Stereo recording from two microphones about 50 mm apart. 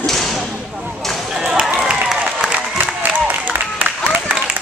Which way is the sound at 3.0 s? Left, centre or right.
Right.